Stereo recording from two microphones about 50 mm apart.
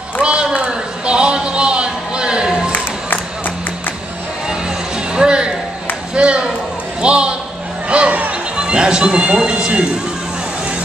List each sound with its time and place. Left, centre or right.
0.2 s a sound: right
2.7 s crowd: left
4.5 s music: centre
6.1 s a sound: right
7.9 s music: right
8.5 s speech: centre